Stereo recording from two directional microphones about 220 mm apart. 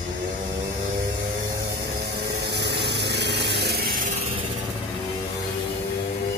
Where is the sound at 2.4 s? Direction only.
50° right (ahead or behind).